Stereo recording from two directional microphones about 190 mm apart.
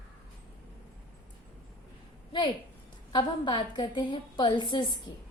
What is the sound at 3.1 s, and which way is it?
A woman's voice, 25° left (ahead or behind).